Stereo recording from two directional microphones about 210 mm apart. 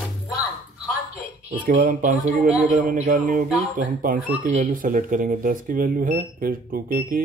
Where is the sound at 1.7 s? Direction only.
40° right (ahead or behind).